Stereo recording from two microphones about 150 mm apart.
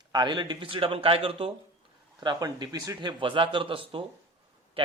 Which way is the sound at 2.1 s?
25° right (ahead or behind).